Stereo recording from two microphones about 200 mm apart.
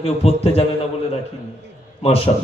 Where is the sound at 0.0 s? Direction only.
30° left (ahead or behind).